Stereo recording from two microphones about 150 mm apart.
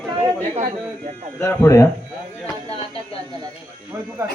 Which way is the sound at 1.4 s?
20° left (ahead or behind).